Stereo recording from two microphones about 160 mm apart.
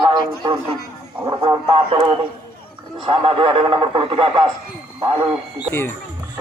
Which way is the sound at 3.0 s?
35° right (ahead or behind).